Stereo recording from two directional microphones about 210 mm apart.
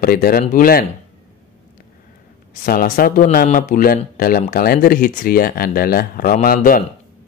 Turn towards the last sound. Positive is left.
turn(degrees=40)  # may be behind; listen again after turning